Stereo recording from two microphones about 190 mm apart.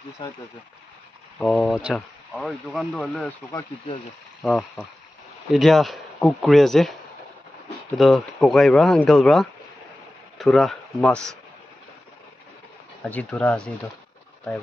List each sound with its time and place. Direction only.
0.2 s speech: 25° left (ahead or behind)
1.4 s speech: 5° left (ahead or behind)
4.4 s speech: centre (ahead or behind)
8.0 s speech: centre (ahead or behind)
13.0 s speech: 5° left (ahead or behind)